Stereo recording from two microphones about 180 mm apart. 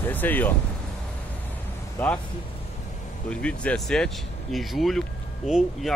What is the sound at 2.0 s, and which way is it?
Speech, 10° left (ahead or behind).